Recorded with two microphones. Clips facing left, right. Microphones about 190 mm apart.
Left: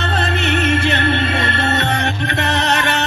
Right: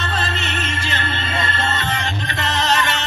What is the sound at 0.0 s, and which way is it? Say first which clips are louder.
Music: left 5 dB; 60° left (ahead or behind).